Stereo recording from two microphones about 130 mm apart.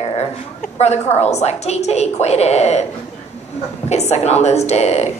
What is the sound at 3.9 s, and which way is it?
A woman's voice, 55° left (ahead or behind).